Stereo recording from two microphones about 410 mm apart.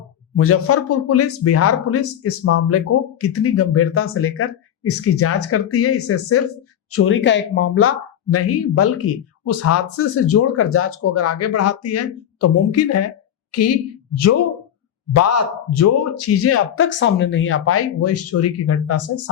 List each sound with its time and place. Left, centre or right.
0.3 s a woman's voice: left